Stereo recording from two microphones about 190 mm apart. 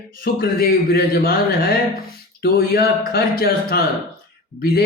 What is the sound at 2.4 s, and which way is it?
Speech, 55° left (ahead or behind).